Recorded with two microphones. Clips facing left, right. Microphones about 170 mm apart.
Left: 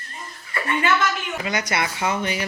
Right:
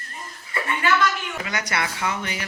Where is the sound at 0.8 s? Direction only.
25° left (ahead or behind).